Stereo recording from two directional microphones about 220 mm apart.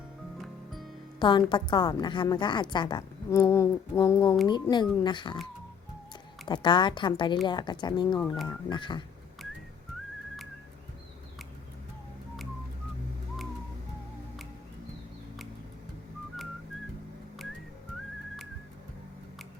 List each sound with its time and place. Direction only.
0.4 s music: centre (ahead or behind)
1.2 s a woman's voice: 20° left (ahead or behind)
6.5 s a woman's voice: 20° left (ahead or behind)